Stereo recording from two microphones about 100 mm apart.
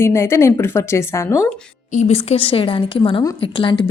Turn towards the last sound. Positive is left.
turn(degrees=55)  # may be behind; listen again after turning